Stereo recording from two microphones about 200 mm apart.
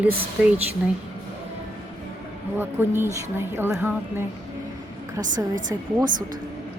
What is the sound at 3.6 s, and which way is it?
Speech, 10° right (ahead or behind).